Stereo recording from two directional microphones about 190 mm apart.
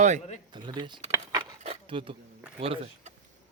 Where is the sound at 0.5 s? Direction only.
25° right (ahead or behind).